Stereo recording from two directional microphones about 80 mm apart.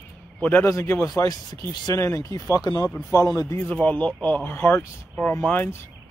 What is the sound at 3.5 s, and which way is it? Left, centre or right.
Speech, centre.